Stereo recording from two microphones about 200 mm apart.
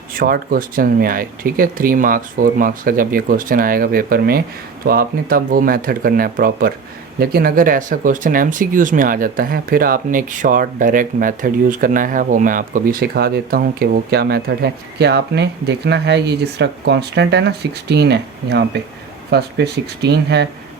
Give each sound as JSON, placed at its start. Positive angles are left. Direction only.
{"t": 0.2, "sound": "speech", "side_deg": -45}